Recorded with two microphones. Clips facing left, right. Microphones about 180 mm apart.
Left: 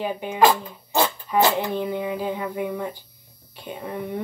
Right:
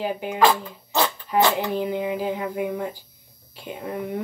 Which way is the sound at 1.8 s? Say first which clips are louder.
Right 1 dB; 15° right (ahead or behind).